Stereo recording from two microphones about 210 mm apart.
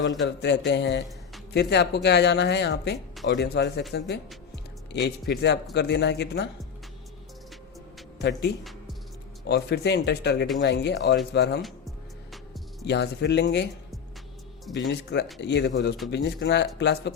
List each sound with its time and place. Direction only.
0.3 s speech: 55° left (ahead or behind)
4.5 s music: 55° left (ahead or behind)
5.3 s speech: 50° left (ahead or behind)
8.2 s speech: 55° left (ahead or behind)
11.6 s music: centre (ahead or behind)
12.8 s speech: 55° left (ahead or behind)
14.7 s speech: 55° left (ahead or behind)